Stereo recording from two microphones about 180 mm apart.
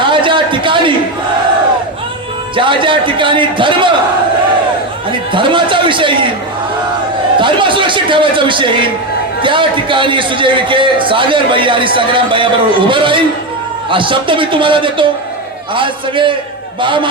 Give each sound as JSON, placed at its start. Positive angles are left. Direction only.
{"t": 0.0, "sound": "a sound", "side_deg": -25}
{"t": 2.6, "sound": "a man's voice", "side_deg": -25}
{"t": 5.3, "sound": "a man's voice", "side_deg": -25}
{"t": 7.3, "sound": "a man's voice", "side_deg": -25}